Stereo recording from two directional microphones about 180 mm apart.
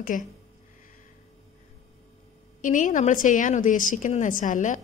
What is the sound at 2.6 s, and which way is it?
A woman's voice, 45° left (ahead or behind).